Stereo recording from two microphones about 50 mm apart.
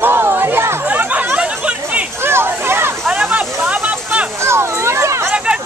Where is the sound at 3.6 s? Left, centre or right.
Right.